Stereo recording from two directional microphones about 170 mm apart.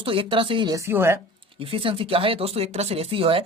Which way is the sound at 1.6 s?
30° right (ahead or behind).